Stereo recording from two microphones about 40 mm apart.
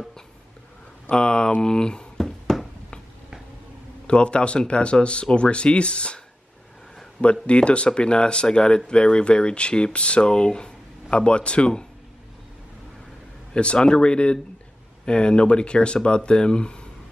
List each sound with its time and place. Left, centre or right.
1.1 s speech: left
2.1 s a sound: centre
4.1 s speech: left
7.4 s speech: left
13.5 s speech: left